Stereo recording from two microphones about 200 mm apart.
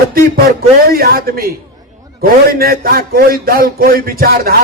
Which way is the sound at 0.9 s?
50° right (ahead or behind).